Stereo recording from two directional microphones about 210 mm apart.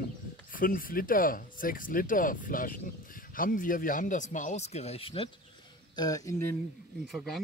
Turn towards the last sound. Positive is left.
turn(degrees=0)  # may be behind; listen again after turning